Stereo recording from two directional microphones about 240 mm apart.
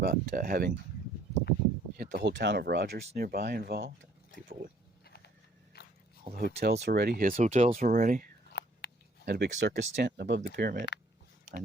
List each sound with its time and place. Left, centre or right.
0.0 s speech: right
2.0 s speech: right
5.0 s a sound: left
5.7 s biting: left
6.3 s speech: right
8.5 s a sound: left
9.2 s speech: right